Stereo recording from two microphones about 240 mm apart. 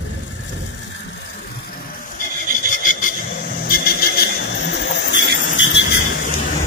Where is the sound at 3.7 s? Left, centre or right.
Left.